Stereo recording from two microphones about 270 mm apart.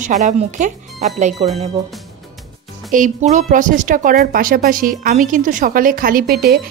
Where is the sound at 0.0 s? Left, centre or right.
Right.